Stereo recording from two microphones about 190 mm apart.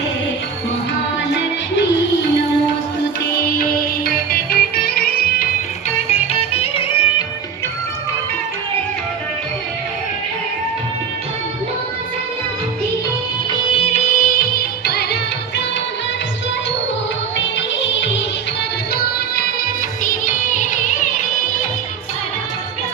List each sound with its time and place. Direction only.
3.6 s music: 50° left (ahead or behind)
6.1 s music: 30° left (ahead or behind)
13.5 s music of bollywood: 30° left (ahead or behind); by 15.6 s 60° left (ahead or behind)
17.3 s music: 70° left (ahead or behind)
20.1 s music: 40° left (ahead or behind)